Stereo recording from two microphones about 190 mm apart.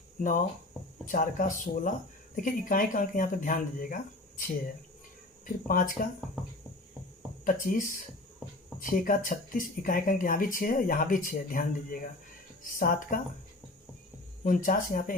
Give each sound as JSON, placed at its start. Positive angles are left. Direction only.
{"t": 0.2, "sound": "speech", "side_deg": 45}
{"t": 5.6, "sound": "speech", "side_deg": 45}
{"t": 7.4, "sound": "speech", "side_deg": 45}
{"t": 8.8, "sound": "speech", "side_deg": 45}
{"t": 14.4, "sound": "speech", "side_deg": 45}